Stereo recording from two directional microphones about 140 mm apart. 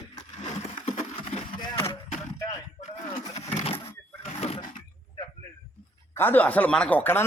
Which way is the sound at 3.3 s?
45° left (ahead or behind).